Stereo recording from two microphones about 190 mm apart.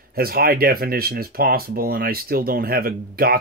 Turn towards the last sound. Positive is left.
turn(degrees=-50)  # may be behind; listen again after turning